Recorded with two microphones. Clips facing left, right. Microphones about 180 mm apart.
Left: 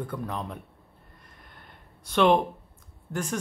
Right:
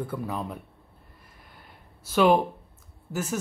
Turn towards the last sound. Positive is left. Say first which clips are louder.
# right 1 dB
turn(degrees=-5)  # may be behind; listen again after turning